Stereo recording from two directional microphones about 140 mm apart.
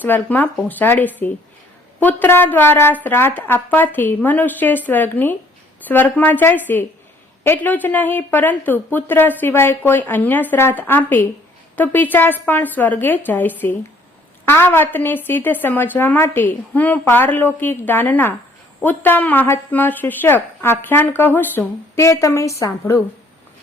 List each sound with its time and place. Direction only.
0.0 s a woman's voice: 10° left (ahead or behind)